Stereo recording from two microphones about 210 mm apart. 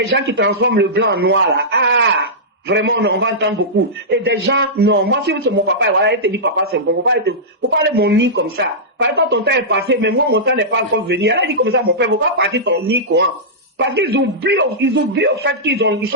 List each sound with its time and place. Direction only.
0.1 s speech: 55° right (ahead or behind)